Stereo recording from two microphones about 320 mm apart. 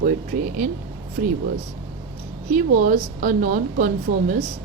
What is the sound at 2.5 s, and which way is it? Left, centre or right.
Speech, right.